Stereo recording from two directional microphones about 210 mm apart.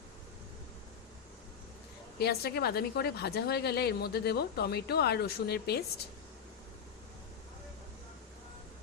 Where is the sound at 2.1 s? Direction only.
50° left (ahead or behind).